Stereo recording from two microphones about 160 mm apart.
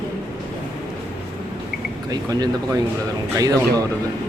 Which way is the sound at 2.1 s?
25° right (ahead or behind).